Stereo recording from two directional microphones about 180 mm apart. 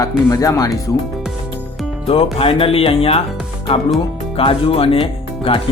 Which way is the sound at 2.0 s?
30° left (ahead or behind).